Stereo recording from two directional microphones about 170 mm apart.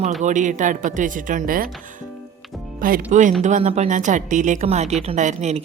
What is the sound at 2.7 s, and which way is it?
A woman's voice, 55° right (ahead or behind).